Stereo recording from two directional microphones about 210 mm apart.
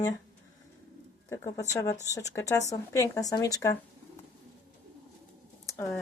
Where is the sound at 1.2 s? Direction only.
15° left (ahead or behind).